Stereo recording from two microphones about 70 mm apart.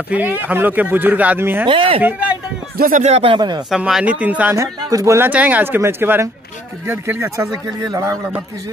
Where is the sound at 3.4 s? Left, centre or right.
Right.